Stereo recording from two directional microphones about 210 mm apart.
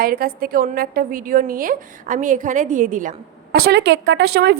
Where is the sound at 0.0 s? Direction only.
45° right (ahead or behind).